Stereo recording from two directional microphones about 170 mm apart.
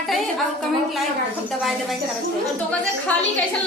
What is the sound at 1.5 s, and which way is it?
Speech, centre (ahead or behind).